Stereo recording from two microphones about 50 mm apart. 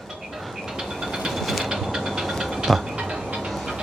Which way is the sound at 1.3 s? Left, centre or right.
Centre.